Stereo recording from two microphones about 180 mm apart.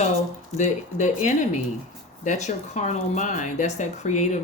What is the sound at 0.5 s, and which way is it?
Speech, 40° left (ahead or behind).